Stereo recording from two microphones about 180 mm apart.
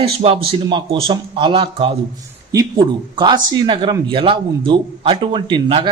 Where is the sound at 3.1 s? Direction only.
25° right (ahead or behind).